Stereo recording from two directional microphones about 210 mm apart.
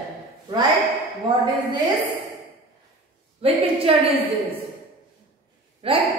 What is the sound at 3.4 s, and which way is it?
Speech, 30° right (ahead or behind).